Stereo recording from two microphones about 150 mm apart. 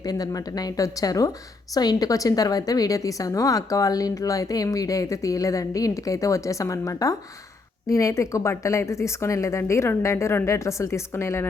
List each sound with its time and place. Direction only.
0.0 s a woman's voice: 25° left (ahead or behind)